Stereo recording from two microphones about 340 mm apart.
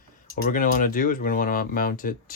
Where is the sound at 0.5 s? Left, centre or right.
Left.